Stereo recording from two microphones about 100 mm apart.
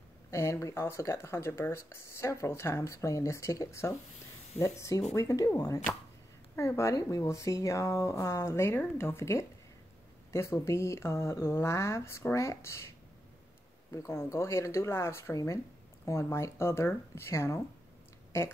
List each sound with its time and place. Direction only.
0.3 s speech: 30° left (ahead or behind)
13.9 s speech: 30° left (ahead or behind)